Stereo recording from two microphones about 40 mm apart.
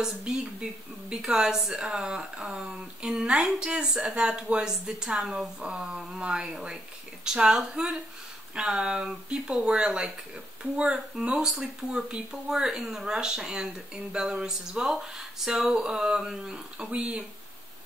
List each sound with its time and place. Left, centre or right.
0.3 s speech: centre
14.9 s speech: centre; by 17.2 s right